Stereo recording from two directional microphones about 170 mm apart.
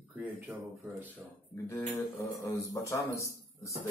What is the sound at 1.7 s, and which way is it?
Speech, 15° left (ahead or behind).